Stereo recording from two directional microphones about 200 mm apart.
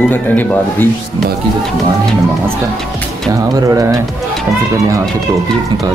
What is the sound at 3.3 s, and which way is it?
Speech, 15° right (ahead or behind).